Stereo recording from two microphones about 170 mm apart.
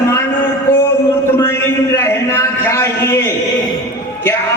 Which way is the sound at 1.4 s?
15° left (ahead or behind).